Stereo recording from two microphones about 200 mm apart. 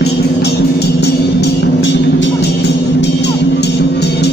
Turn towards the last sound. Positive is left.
turn(degrees=60)  # may be behind; listen again after turning